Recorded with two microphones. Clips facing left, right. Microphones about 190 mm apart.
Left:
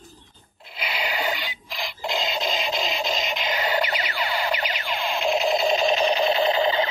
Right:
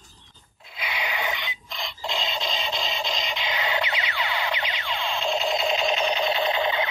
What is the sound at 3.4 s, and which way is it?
Music, 40° left (ahead or behind).